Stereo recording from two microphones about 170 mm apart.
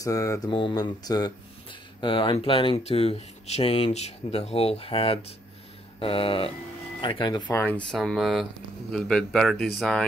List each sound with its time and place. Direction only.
0.0 s speech: 20° left (ahead or behind)
7.4 s speech: 10° left (ahead or behind)